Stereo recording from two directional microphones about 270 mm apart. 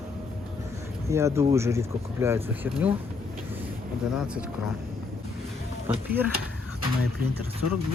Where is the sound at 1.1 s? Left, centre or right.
Centre.